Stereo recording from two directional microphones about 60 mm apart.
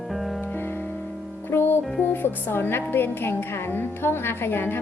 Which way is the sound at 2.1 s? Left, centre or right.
Left.